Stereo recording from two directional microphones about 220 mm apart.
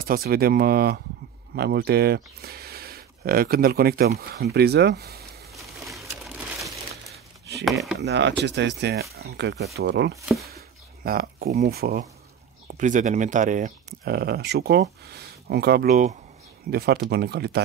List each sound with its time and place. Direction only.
0.0 s speech: 45° right (ahead or behind)
5.5 s a sound: centre (ahead or behind)
7.6 s speech: centre (ahead or behind)
8.0 s speech: 55° right (ahead or behind); by 13.7 s 35° right (ahead or behind)
14.0 s speech: 45° right (ahead or behind)
15.9 s speech: 30° right (ahead or behind)
16.7 s speech: 45° right (ahead or behind)